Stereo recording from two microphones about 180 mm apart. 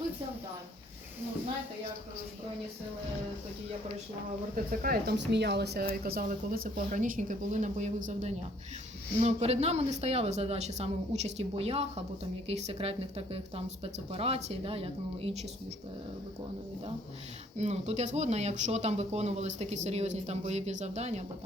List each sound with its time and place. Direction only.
4.5 s speech: 50° right (ahead or behind); by 15.4 s 35° right (ahead or behind)
17.6 s speech: 40° right (ahead or behind)